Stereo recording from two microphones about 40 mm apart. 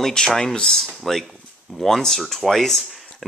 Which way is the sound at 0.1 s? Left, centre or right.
Centre.